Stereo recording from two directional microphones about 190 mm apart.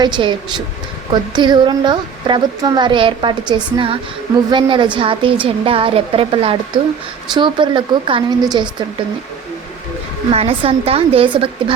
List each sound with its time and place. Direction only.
0.0 s a woman's voice: 25° right (ahead or behind)
10.2 s a woman's voice: 30° right (ahead or behind)